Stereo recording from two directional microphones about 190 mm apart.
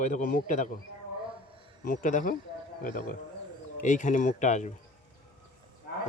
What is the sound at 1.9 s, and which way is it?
A man's voice, 45° left (ahead or behind).